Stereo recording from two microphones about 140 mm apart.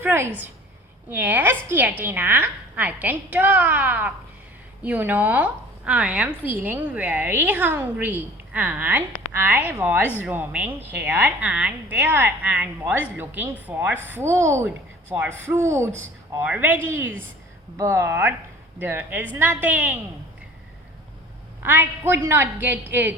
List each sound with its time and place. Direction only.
0.0 s a woman's voice: 15° right (ahead or behind)
21.6 s a woman's voice: 15° right (ahead or behind)